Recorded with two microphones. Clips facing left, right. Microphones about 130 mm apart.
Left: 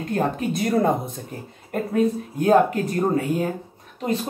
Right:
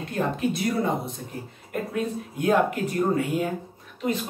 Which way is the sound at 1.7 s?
35° left (ahead or behind).